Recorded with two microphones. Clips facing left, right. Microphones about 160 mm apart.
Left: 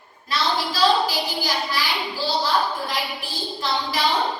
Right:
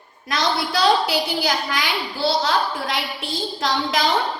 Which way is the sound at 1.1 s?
80° right.